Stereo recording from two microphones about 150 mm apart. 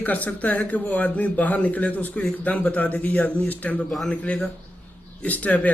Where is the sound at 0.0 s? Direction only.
10° left (ahead or behind).